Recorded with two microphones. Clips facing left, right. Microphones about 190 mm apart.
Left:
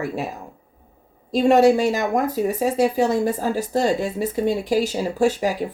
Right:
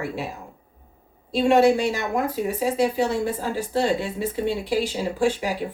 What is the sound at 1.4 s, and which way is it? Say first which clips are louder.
Speech: left 3 dB; 40° left (ahead or behind).